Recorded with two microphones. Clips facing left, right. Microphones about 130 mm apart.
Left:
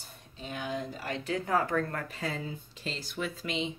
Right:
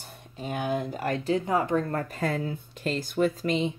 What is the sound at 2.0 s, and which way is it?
Speech, 50° right (ahead or behind).